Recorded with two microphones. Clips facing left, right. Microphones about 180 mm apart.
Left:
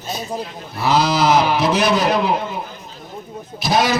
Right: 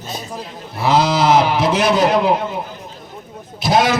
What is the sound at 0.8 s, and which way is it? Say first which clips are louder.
Speech: right 1 dB; 25° right (ahead or behind).